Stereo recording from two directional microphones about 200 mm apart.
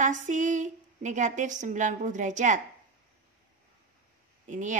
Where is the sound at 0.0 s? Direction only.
40° right (ahead or behind).